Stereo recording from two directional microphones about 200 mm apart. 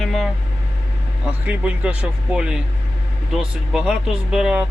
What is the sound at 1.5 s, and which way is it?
Speech, 5° right (ahead or behind).